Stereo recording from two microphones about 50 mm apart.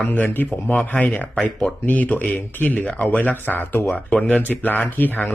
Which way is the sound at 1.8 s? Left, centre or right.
Left.